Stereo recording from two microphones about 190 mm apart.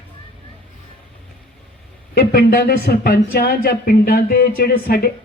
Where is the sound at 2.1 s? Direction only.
55° left (ahead or behind).